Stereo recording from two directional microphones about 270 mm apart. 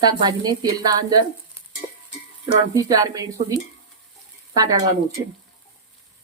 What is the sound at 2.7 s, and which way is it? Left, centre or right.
Speech, centre.